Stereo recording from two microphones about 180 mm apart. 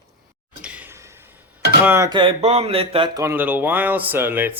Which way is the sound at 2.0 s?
30° right (ahead or behind).